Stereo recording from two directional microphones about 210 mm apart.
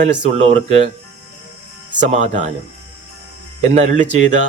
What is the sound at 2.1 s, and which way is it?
Speech, 35° right (ahead or behind).